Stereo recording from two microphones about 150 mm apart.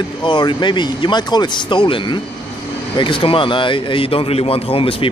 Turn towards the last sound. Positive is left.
turn(degrees=40)  # may be behind; listen again after turning